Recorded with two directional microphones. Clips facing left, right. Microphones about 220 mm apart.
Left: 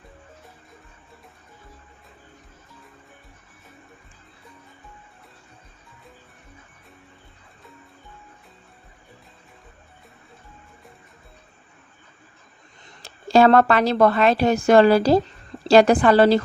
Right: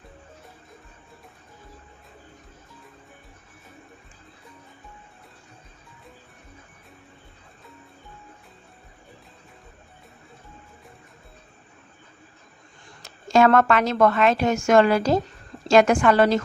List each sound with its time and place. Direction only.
13.0 s a woman's voice: 30° left (ahead or behind)